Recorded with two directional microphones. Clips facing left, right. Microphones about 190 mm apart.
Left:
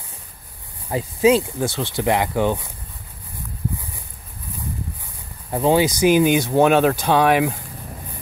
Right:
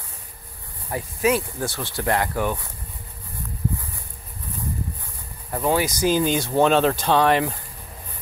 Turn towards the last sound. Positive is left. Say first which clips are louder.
# left 2 dB
turn(degrees=10)  # may be behind; listen again after turning